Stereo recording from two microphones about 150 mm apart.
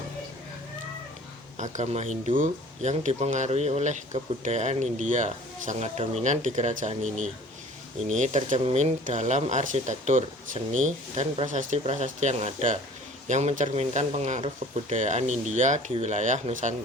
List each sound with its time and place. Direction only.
1.5 s speech: 55° right (ahead or behind)